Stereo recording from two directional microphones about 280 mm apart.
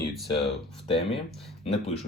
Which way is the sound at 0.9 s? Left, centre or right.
Centre.